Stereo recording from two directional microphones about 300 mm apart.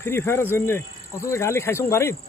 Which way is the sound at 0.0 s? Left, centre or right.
Centre.